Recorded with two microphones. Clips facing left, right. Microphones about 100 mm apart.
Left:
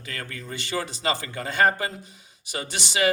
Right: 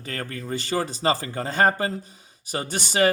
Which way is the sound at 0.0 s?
40° right (ahead or behind).